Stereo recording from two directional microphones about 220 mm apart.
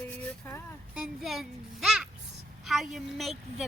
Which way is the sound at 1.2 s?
Centre (ahead or behind).